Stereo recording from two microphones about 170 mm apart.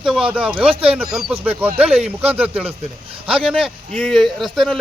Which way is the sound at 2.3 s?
10° right (ahead or behind).